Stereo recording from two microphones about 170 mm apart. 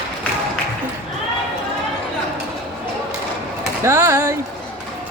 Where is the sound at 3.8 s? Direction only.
15° right (ahead or behind).